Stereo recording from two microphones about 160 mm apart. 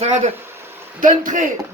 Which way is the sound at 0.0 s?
45° right (ahead or behind).